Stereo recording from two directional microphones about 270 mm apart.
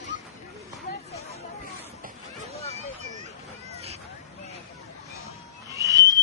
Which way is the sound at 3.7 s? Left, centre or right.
Right.